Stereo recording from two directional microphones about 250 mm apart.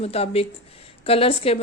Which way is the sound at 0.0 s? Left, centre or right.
Left.